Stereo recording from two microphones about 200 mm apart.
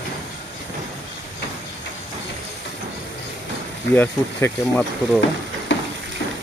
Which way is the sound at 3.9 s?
10° left (ahead or behind).